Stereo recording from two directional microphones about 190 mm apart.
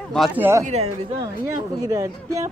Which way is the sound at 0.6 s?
35° right (ahead or behind).